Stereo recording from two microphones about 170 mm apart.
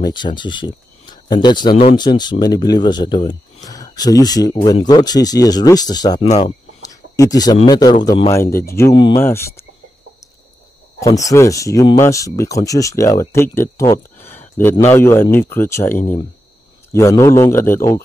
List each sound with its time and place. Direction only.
0.0 s speech: 25° left (ahead or behind)
6.1 s speech: 40° left (ahead or behind)
6.8 s a sound: 20° left (ahead or behind)
7.6 s a man's voice: 25° left (ahead or behind)
8.9 s speech: 25° left (ahead or behind)
9.2 s a man's voice: 15° left (ahead or behind)
11.0 s speech: 20° left (ahead or behind)
15.9 s speech: 50° left (ahead or behind)
16.9 s a man's voice: 15° left (ahead or behind)